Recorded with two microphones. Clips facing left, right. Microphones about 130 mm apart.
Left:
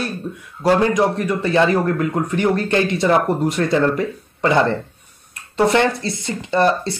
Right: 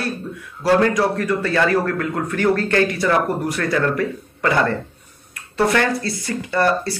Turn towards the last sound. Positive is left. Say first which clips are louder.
# left 2 dB
turn(degrees=20)  # may be behind; listen again after turning